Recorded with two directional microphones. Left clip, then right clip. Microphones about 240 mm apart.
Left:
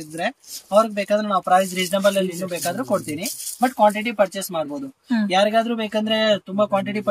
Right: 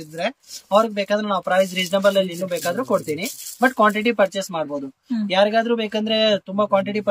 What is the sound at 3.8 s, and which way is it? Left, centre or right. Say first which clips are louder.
Speech: left 1 dB; centre.